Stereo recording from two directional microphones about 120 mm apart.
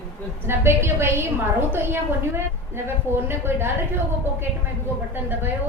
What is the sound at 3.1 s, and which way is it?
Speech, 20° right (ahead or behind).